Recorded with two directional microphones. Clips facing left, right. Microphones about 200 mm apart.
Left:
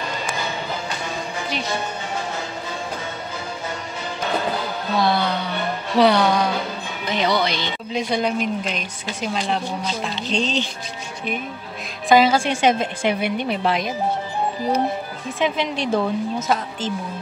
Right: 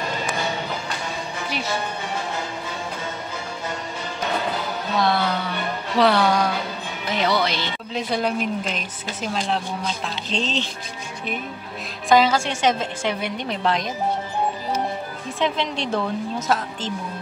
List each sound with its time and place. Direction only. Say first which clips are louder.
4.9 s a sound: left 1 dB; centre (ahead or behind)
5.9 s music: left 2 dB; centre (ahead or behind)
7.1 s speech: left 1 dB; 5° right (ahead or behind)
12.1 s a woman's voice: left 2 dB; 10° left (ahead or behind)
15.3 s a woman's voice: left 2 dB; 5° left (ahead or behind)